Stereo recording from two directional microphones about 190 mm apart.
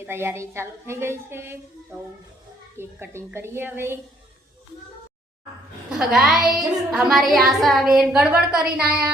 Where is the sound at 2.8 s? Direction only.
10° right (ahead or behind).